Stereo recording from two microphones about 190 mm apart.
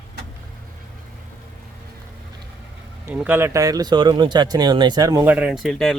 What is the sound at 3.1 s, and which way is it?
Speech, 10° right (ahead or behind).